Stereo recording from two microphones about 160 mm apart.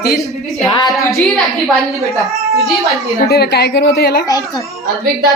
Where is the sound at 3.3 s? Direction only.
85° left.